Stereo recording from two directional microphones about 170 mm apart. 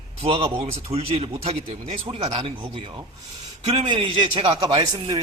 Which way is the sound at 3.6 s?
40° right (ahead or behind).